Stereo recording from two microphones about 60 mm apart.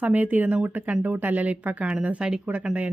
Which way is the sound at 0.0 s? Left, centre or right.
Right.